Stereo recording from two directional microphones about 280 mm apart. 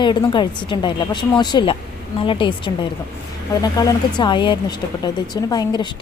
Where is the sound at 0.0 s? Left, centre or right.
Centre.